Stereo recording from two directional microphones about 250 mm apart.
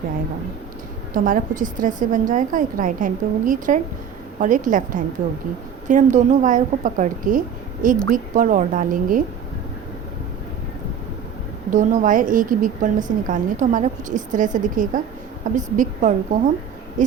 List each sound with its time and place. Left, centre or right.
1.1 s a woman's voice: right
11.7 s a woman's voice: right